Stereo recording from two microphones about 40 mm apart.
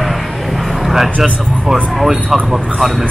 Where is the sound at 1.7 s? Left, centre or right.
Centre.